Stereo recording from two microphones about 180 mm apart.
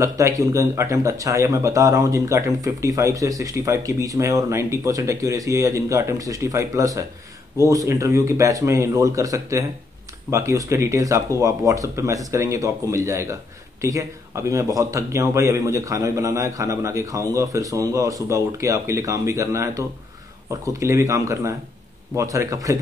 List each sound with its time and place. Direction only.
0.0 s speech: 15° right (ahead or behind)